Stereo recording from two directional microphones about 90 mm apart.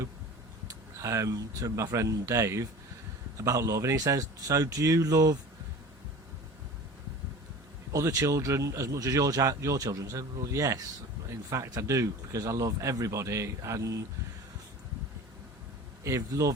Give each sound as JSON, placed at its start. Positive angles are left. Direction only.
{"t": 1.0, "sound": "speech", "side_deg": -35}
{"t": 7.9, "sound": "speech", "side_deg": -40}
{"t": 16.0, "sound": "speech", "side_deg": -35}